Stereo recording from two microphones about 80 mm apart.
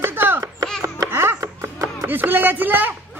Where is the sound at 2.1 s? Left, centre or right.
Right.